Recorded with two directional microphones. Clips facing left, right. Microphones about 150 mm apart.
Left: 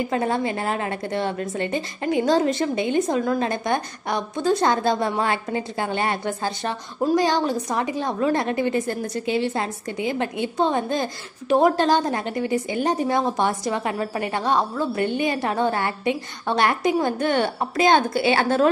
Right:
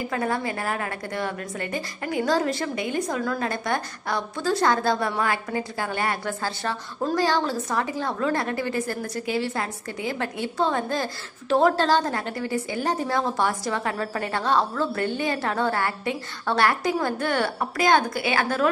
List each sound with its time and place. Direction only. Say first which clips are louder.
0.1 s a woman's voice: left 3 dB; 25° left (ahead or behind)